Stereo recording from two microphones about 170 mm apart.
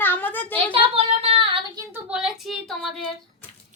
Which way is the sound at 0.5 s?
35° right (ahead or behind).